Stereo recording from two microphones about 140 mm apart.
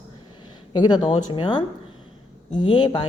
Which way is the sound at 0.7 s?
30° left (ahead or behind).